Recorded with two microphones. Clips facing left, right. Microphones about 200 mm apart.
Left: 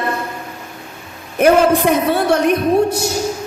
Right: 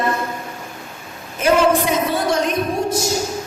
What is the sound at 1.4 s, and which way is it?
A woman's voice, 60° left (ahead or behind).